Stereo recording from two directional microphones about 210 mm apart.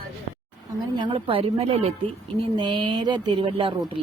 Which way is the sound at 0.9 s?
25° right (ahead or behind).